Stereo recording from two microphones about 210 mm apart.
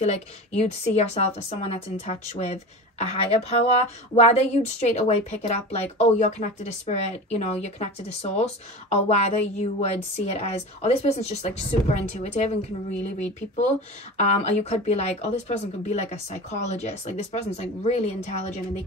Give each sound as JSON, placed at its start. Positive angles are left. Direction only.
{"t": 0.0, "sound": "a woman's voice", "side_deg": 30}